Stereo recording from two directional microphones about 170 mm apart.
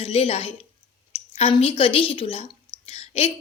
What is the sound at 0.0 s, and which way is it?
A woman's voice, 35° left (ahead or behind).